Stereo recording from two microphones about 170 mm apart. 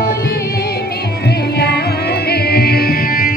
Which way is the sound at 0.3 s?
70° left (ahead or behind).